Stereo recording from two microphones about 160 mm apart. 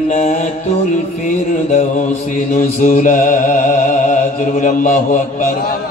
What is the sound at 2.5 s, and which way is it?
Mantra, 55° left (ahead or behind).